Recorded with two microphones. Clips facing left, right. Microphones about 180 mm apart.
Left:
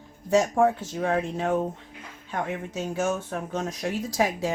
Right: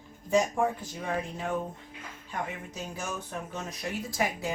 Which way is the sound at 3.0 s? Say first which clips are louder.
Left 10 dB; 65° left (ahead or behind).